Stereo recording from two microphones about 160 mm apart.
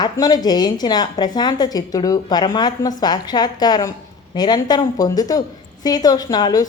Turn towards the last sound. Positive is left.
turn(degrees=25)  # may be behind; listen again after turning